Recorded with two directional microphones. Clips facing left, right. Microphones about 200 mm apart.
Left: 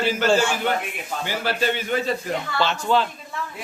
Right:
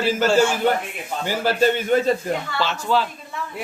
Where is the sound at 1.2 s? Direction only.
45° right (ahead or behind).